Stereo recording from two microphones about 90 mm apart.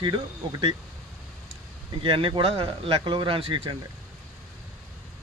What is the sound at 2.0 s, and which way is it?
Speech, 70° right (ahead or behind).